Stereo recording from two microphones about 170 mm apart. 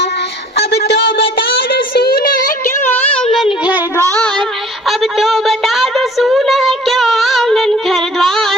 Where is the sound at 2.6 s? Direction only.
15° left (ahead or behind).